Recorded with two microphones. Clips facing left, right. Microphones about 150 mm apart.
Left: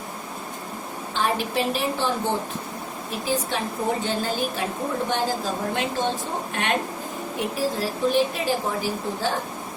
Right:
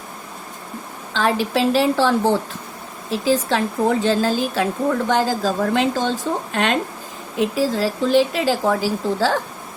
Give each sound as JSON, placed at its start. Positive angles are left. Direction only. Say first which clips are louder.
{"t": 1.1, "sound": "a woman's voice", "louder": "right 5 dB", "side_deg": -90}